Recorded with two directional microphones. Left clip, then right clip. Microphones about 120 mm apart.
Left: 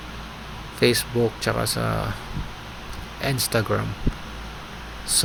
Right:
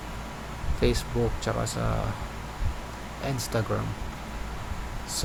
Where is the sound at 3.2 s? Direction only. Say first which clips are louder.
Left 7 dB; 15° left (ahead or behind).